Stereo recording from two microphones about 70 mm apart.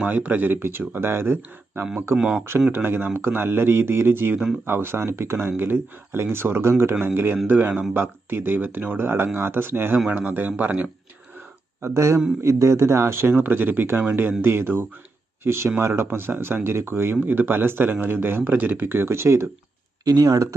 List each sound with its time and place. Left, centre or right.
0.0 s speech: right
2.1 s speech: centre
2.7 s a man's voice: right
11.8 s speech: right
20.1 s speech: right